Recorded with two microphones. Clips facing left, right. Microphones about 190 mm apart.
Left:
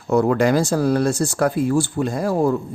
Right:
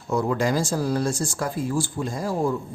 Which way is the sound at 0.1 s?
65° left (ahead or behind).